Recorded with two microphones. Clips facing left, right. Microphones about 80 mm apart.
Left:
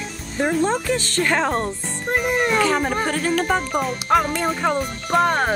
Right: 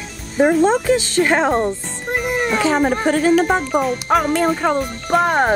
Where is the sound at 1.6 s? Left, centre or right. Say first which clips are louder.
Right 5 dB; centre.